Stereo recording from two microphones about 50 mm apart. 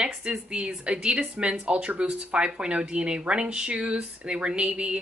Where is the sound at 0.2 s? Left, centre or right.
Centre.